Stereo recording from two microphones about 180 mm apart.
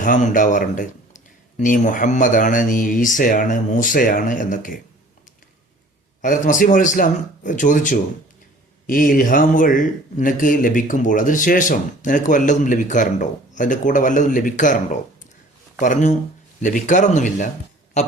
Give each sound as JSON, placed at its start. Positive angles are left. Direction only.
{"t": 0.0, "sound": "speech", "side_deg": 45}
{"t": 6.2, "sound": "speech", "side_deg": 45}
{"t": 15.8, "sound": "speech", "side_deg": 45}